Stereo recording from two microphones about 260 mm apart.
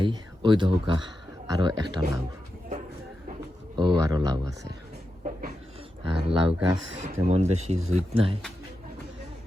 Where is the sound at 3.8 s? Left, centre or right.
Centre.